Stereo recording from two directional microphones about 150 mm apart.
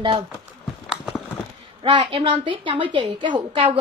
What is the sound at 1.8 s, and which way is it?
A woman's voice, 35° right (ahead or behind).